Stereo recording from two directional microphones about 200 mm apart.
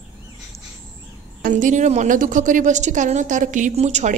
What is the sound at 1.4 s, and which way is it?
A woman's voice, 40° right (ahead or behind).